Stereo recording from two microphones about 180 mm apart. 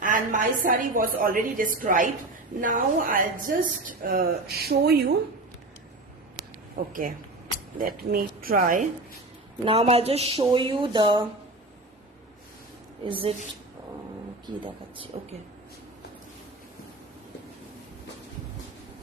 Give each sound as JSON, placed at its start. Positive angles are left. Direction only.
{"t": 0.0, "sound": "speech", "side_deg": -45}
{"t": 7.8, "sound": "speech", "side_deg": -50}
{"t": 9.6, "sound": "a woman's voice", "side_deg": -35}
{"t": 13.1, "sound": "a woman's voice", "side_deg": -30}
{"t": 15.1, "sound": "a woman's voice", "side_deg": -30}